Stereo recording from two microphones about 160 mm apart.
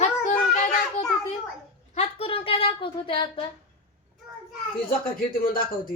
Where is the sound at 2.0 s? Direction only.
40° left (ahead or behind).